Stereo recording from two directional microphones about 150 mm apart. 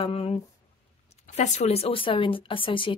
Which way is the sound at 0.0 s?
40° left (ahead or behind).